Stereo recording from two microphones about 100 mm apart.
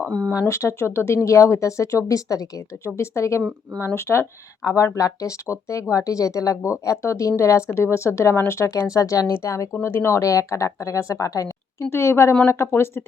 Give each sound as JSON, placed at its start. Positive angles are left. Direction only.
{"t": 0.1, "sound": "speech", "side_deg": 10}
{"t": 0.3, "sound": "speech", "side_deg": 30}